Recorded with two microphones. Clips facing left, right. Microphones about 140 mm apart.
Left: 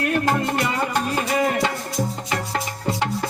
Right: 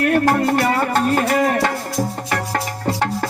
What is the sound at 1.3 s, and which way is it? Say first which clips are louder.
Music: right 4 dB; 50° right (ahead or behind).